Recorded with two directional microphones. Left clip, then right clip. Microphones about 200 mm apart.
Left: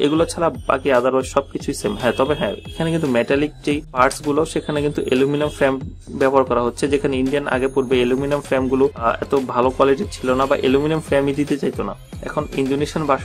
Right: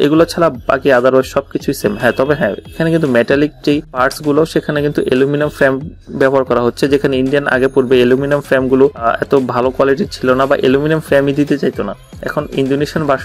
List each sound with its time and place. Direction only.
0.0 s speech: 20° right (ahead or behind)